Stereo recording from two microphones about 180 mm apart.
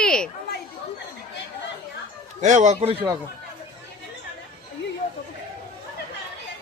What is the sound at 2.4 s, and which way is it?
Speech, 40° right (ahead or behind).